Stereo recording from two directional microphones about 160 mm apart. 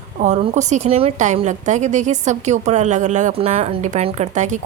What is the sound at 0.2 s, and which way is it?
A woman's voice, 45° right (ahead or behind).